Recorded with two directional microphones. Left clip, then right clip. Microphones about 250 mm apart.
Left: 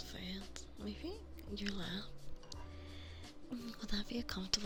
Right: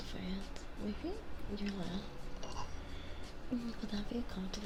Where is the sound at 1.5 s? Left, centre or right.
Left.